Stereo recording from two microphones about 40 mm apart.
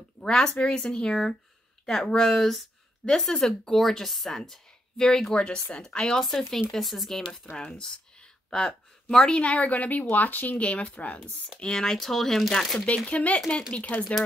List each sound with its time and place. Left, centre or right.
0.2 s speech: centre
2.3 s speech: centre
3.1 s speech: centre
5.3 s a woman's voice: left
6.2 s speech: centre
7.5 s a woman's voice: left
9.5 s a woman's voice: left
11.6 s speech: centre
12.8 s a woman's voice: left